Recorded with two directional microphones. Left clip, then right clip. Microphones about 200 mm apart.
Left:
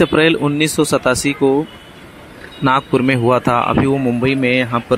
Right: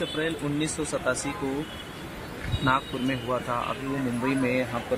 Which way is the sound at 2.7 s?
50° left (ahead or behind).